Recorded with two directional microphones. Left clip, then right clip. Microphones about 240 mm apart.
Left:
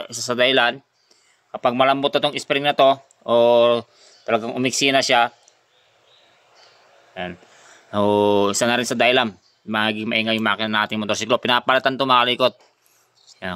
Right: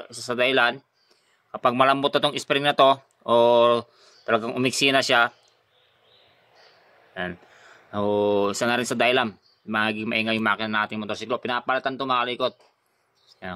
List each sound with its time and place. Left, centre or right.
0.0 s speech: left; by 5.3 s centre
7.2 s speech: centre
7.9 s speech: left